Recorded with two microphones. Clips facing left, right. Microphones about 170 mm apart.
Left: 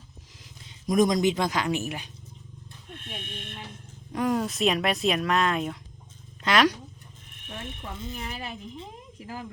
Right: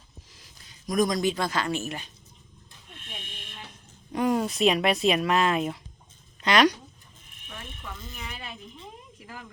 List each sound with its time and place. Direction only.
0.3 s speech: 20° left (ahead or behind)
2.9 s a sound: 55° left (ahead or behind)
4.1 s speech: centre (ahead or behind)
7.5 s speech: 25° left (ahead or behind)